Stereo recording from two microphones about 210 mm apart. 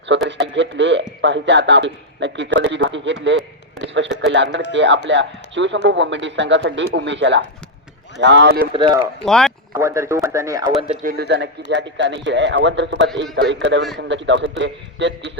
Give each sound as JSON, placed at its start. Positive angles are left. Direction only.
{"t": 0.3, "sound": "a man's voice", "side_deg": -55}
{"t": 3.2, "sound": "a sound", "side_deg": -55}
{"t": 4.3, "sound": "a man's voice", "side_deg": -60}
{"t": 8.7, "sound": "speech", "side_deg": -25}
{"t": 9.2, "sound": "speech", "side_deg": 0}
{"t": 9.7, "sound": "speech", "side_deg": -15}
{"t": 11.0, "sound": "a man's voice", "side_deg": -50}